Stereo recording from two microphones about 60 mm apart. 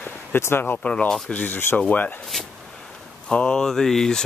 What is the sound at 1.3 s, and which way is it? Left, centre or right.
Speech, left.